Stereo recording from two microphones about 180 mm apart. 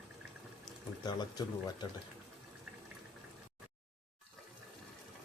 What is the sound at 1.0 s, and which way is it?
Speech, 25° left (ahead or behind).